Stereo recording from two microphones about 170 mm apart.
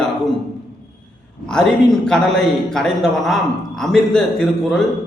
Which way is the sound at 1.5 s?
5° left (ahead or behind).